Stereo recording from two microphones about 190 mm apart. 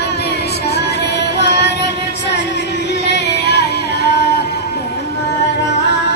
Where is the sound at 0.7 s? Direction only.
60° left (ahead or behind).